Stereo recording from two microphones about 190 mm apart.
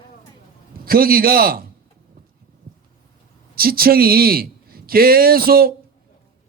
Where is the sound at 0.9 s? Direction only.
50° right (ahead or behind).